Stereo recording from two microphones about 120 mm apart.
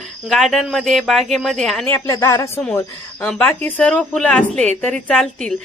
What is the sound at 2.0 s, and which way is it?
Speech, 25° left (ahead or behind).